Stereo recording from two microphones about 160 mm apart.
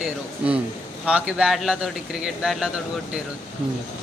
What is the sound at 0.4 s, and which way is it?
Speech, 10° right (ahead or behind).